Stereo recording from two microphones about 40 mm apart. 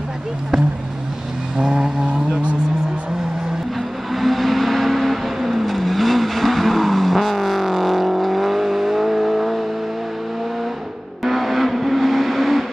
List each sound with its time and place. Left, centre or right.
1.6 s vehicle: centre
4.1 s vehicle: centre
11.2 s vehicle: centre